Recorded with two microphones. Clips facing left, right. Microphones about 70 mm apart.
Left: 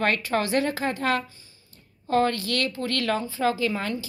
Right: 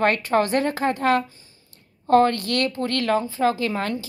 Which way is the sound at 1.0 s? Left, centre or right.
Right.